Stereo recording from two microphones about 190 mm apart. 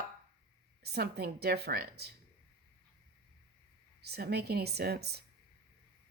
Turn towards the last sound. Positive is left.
turn(degrees=-60)  # may be behind; listen again after turning